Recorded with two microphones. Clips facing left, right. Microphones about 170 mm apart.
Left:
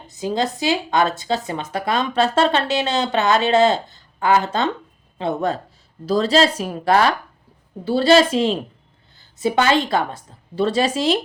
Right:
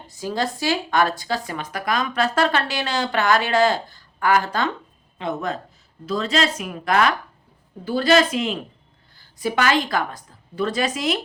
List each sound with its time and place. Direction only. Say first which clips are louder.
0.1 s speech: left 3 dB; 20° left (ahead or behind)